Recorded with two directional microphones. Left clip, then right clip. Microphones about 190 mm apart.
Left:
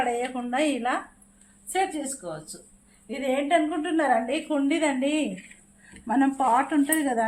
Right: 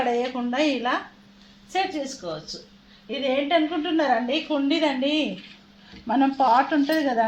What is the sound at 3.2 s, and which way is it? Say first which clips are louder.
A woman's voice: right 1 dB; 20° right (ahead or behind).